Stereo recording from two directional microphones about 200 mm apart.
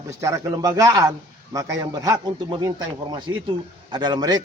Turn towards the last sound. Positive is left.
turn(degrees=-20)  # may be behind; listen again after turning